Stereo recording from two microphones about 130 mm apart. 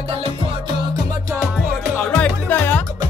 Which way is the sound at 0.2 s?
45° right (ahead or behind).